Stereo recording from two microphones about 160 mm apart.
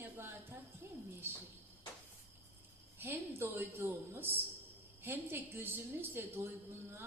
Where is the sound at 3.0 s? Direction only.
15° right (ahead or behind).